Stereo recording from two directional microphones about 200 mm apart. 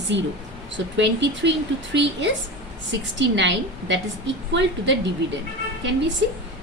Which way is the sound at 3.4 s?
65° right (ahead or behind).